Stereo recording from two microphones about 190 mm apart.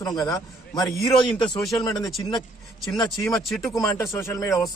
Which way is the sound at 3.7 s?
15° left (ahead or behind).